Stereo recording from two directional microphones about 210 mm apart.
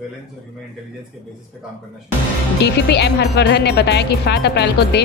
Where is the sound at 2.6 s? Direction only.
50° left (ahead or behind).